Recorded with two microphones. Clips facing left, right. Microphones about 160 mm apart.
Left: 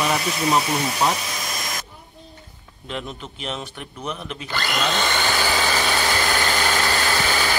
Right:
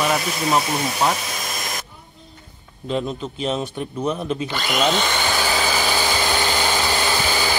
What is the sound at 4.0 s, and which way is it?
Speech, 35° right (ahead or behind).